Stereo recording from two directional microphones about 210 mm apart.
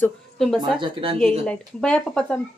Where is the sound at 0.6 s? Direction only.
25° right (ahead or behind).